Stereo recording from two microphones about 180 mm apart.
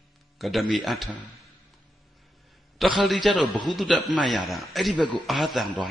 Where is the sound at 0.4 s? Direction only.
Centre (ahead or behind).